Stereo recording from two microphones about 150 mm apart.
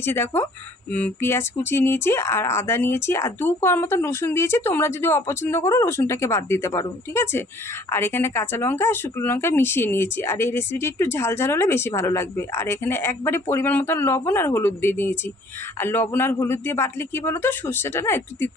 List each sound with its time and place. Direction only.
0.0 s speech: 15° left (ahead or behind)